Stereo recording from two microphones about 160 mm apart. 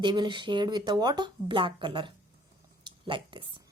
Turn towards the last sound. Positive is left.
turn(degrees=-30)  # may be behind; listen again after turning